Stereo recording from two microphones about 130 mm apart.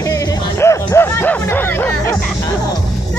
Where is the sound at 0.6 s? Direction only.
20° left (ahead or behind).